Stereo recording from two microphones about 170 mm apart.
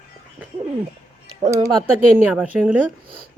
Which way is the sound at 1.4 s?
20° right (ahead or behind).